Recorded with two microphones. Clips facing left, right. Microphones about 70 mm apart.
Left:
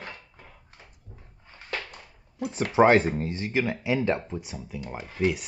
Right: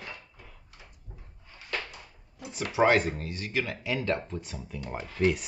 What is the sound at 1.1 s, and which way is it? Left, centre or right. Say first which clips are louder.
Bathtub: even; right.